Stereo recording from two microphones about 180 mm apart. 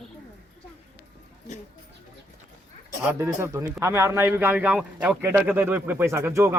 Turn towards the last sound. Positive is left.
turn(degrees=-15)  # may be behind; listen again after turning